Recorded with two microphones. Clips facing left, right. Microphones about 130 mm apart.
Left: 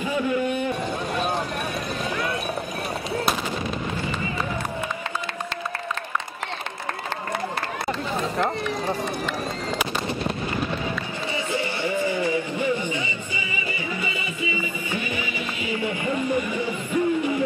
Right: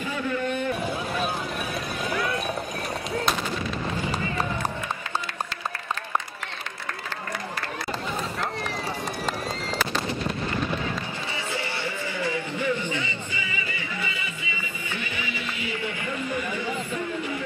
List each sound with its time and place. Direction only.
0.3 s a man's voice: 15° left (ahead or behind)
2.1 s clip-clop: centre (ahead or behind)
3.1 s gunshot: 5° left (ahead or behind)
11.5 s music: 15° left (ahead or behind)